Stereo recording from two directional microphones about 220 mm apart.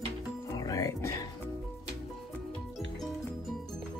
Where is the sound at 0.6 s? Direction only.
15° left (ahead or behind).